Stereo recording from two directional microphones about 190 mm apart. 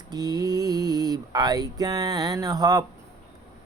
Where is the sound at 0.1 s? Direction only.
20° right (ahead or behind).